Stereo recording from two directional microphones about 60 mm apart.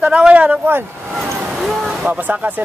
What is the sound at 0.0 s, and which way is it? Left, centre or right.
Speech, centre.